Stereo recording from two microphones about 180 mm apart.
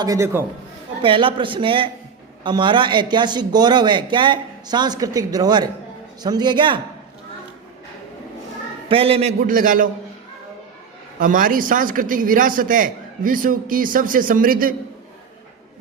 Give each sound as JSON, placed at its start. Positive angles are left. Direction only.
{"t": 0.0, "sound": "a man's voice", "side_deg": -15}
{"t": 1.0, "sound": "a man's voice", "side_deg": -30}
{"t": 8.9, "sound": "a man's voice", "side_deg": -30}
{"t": 11.2, "sound": "a man's voice", "side_deg": -50}